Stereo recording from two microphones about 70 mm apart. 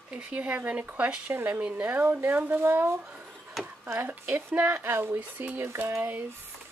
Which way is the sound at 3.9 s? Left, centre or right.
Right.